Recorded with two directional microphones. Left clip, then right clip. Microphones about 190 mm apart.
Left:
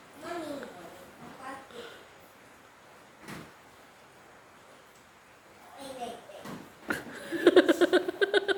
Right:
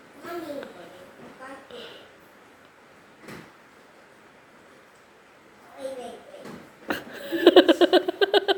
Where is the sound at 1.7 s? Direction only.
15° right (ahead or behind).